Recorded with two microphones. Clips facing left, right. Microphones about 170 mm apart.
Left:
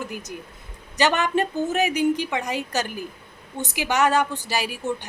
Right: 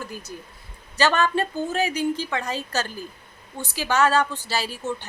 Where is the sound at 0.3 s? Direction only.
15° left (ahead or behind).